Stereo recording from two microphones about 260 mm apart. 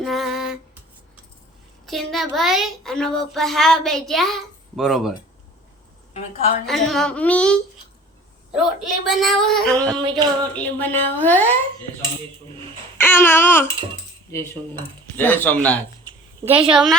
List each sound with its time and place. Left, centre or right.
0.0 s a sound: centre
1.9 s speech: centre
6.7 s speech: centre
9.9 s a sound: centre
10.5 s a woman's voice: centre
13.0 s a woman's voice: centre